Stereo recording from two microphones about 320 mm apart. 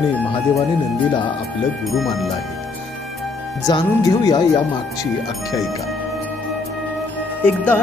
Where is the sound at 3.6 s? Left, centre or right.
Centre.